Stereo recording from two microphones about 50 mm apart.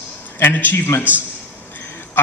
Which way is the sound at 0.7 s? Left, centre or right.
Left.